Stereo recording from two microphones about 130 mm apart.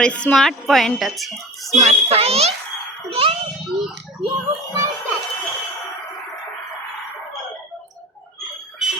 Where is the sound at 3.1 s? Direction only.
45° right (ahead or behind).